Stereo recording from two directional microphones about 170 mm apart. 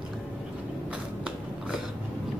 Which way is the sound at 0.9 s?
5° right (ahead or behind).